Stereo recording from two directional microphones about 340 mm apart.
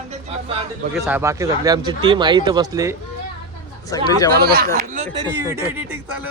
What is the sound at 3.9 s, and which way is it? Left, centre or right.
Speech, centre.